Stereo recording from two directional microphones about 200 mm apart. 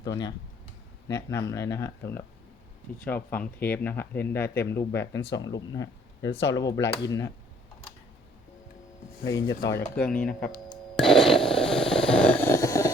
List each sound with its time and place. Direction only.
0.0 s speech: 20° left (ahead or behind)
9.2 s speech: 15° left (ahead or behind)
10.9 s a sound: centre (ahead or behind)